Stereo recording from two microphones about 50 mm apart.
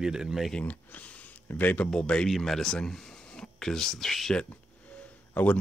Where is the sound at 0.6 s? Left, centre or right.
Left.